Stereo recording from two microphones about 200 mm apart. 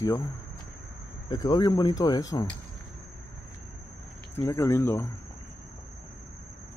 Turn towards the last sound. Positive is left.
turn(degrees=10)  # may be behind; listen again after turning